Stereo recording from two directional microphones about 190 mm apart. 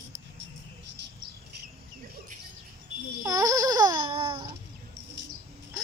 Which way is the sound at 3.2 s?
15° right (ahead or behind).